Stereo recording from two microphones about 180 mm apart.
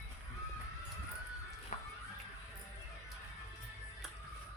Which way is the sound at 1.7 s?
40° left (ahead or behind).